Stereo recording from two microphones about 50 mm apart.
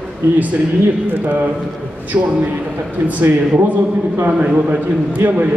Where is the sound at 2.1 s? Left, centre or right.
Right.